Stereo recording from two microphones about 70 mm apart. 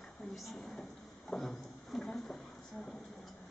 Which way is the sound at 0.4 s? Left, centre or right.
Centre.